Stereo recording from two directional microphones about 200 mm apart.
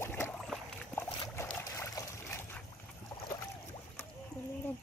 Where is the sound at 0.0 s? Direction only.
10° left (ahead or behind).